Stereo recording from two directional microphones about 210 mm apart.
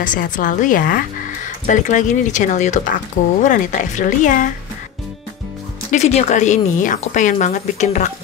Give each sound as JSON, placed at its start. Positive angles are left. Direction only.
{"t": 0.0, "sound": "speech", "side_deg": 40}
{"t": 5.9, "sound": "speech", "side_deg": 30}